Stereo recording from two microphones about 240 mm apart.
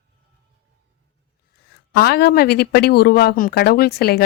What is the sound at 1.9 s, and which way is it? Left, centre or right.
A woman's voice, left.